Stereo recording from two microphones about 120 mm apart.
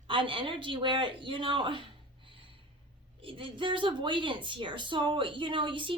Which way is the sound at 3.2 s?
45° right (ahead or behind).